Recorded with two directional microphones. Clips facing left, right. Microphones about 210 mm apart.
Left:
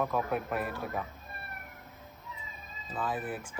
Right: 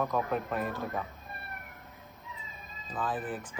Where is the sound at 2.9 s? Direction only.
10° left (ahead or behind).